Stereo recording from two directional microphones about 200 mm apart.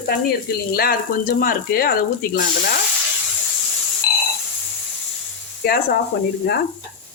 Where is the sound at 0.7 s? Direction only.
45° left (ahead or behind).